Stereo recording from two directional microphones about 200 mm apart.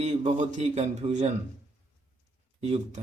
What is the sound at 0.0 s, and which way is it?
Speech, 35° right (ahead or behind).